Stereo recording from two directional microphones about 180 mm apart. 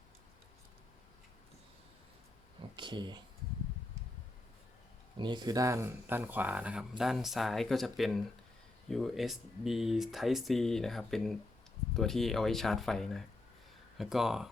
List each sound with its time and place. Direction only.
2.7 s speech: 25° right (ahead or behind)
5.1 s speech: 25° right (ahead or behind); by 14.5 s centre (ahead or behind)